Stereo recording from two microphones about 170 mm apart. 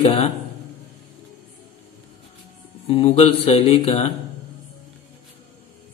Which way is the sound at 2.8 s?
35° left (ahead or behind).